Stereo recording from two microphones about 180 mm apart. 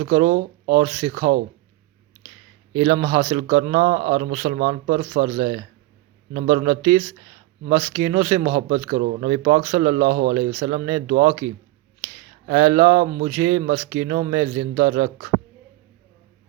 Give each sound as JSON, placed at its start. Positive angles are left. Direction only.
{"t": 0.0, "sound": "speech", "side_deg": -45}
{"t": 2.9, "sound": "speech", "side_deg": -35}
{"t": 3.2, "sound": "speech", "side_deg": -50}
{"t": 4.2, "sound": "speech", "side_deg": -40}
{"t": 6.7, "sound": "speech", "side_deg": -30}
{"t": 8.4, "sound": "speech", "side_deg": -50}
{"t": 10.0, "sound": "speech", "side_deg": -55}
{"t": 10.3, "sound": "speech", "side_deg": -45}
{"t": 11.1, "sound": "speech", "side_deg": -55}
{"t": 12.5, "sound": "speech", "side_deg": -30}
{"t": 12.9, "sound": "speech", "side_deg": -55}
{"t": 13.2, "sound": "speech", "side_deg": -30}
{"t": 14.2, "sound": "speech", "side_deg": -40}